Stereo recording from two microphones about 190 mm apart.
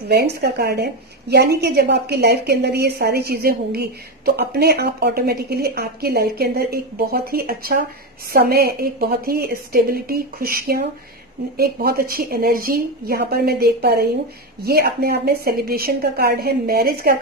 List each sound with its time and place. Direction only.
0.1 s a woman's voice: 60° right (ahead or behind)